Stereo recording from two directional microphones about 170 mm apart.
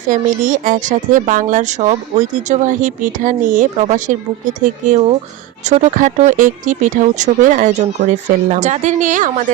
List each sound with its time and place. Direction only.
0.1 s speech: 50° right (ahead or behind)